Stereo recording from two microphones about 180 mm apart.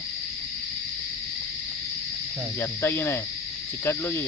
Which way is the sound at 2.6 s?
15° left (ahead or behind).